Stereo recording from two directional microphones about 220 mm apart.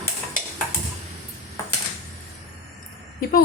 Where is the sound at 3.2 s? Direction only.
40° left (ahead or behind).